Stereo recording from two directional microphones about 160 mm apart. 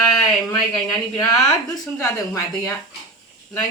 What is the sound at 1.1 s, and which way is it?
A woman's voice, 15° left (ahead or behind).